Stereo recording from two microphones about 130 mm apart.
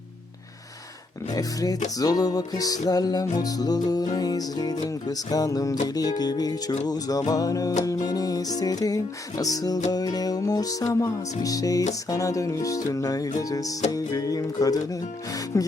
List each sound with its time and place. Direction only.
1.3 s music: 30° left (ahead or behind)